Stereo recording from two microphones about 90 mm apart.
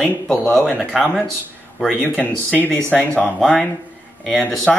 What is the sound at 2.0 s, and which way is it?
Speech, 20° left (ahead or behind).